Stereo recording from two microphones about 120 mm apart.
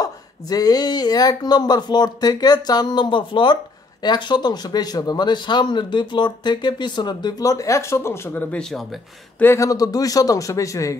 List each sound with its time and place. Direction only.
0.0 s speech: 30° left (ahead or behind); by 8.8 s 5° left (ahead or behind)
9.4 s a man's voice: 20° left (ahead or behind)